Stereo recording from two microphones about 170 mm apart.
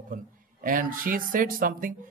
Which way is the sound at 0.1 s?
55° right (ahead or behind).